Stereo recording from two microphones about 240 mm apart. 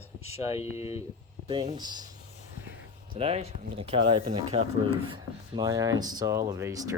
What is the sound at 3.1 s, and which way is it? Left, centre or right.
Speech, right.